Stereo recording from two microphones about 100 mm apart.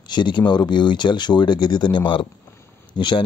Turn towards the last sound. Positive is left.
turn(degrees=50)  # may be behind; listen again after turning